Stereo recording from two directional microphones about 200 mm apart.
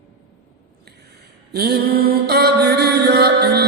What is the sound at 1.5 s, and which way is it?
Mantra, 50° right (ahead or behind).